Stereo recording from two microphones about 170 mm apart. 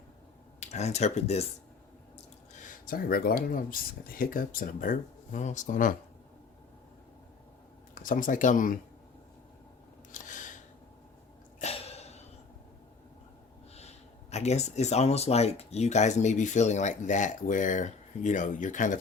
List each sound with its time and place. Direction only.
0.6 s speech: 40° left (ahead or behind)
2.5 s speech: 55° left (ahead or behind)
8.0 s speech: 50° left (ahead or behind)
10.1 s a sound: 50° left (ahead or behind)
11.6 s cough: 40° left (ahead or behind)
13.7 s speech: 40° left (ahead or behind)